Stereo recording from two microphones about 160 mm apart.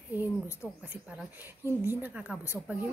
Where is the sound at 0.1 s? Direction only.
10° right (ahead or behind).